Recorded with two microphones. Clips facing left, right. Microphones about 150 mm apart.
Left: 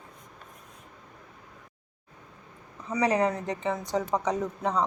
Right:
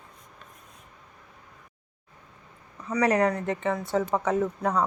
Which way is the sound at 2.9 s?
30° left (ahead or behind).